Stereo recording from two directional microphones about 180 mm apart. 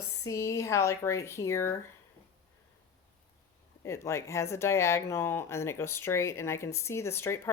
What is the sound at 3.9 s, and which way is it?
Speech, 15° left (ahead or behind).